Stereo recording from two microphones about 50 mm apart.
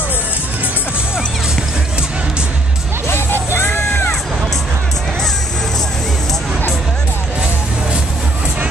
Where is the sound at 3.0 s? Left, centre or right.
Left.